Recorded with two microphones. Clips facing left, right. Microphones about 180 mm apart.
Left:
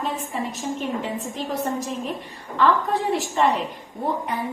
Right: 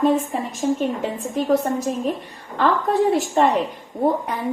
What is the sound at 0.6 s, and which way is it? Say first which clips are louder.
A woman's voice: right 9 dB; 50° right (ahead or behind).